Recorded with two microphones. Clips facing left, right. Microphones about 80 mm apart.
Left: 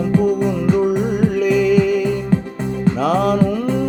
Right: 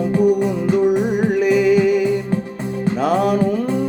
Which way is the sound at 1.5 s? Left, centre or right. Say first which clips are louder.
Right 1 dB; left.